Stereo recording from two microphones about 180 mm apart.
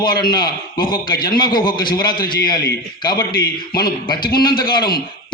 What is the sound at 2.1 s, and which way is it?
Speech, 55° left (ahead or behind).